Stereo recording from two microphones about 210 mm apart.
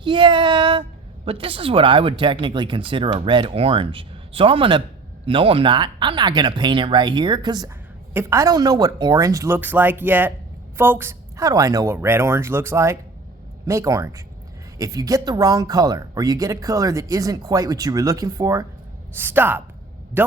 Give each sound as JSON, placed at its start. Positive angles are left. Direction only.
{"t": 0.0, "sound": "a woman's voice", "side_deg": -20}